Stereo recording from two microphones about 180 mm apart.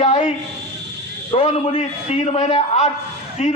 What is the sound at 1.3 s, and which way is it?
A man's voice, 40° left (ahead or behind).